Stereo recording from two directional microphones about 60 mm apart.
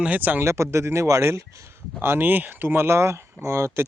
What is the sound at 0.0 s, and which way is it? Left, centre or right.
Speech, right.